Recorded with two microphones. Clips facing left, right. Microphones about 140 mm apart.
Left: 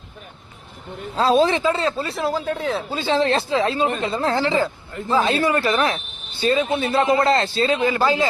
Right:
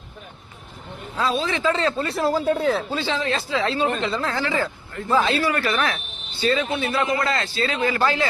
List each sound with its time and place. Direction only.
1.1 s a man's voice: 35° left (ahead or behind)
1.5 s speech: 15° left (ahead or behind)
2.0 s speech: centre (ahead or behind)
2.9 s speech: 20° left (ahead or behind)
3.2 s speech: 30° left (ahead or behind)
5.1 s speech: 35° left (ahead or behind)
7.8 s speech: 15° left (ahead or behind)